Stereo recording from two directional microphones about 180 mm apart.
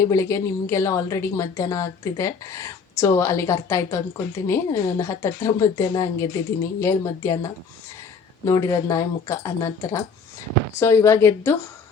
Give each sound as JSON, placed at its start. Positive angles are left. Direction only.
{"t": 0.0, "sound": "a woman's voice", "side_deg": 15}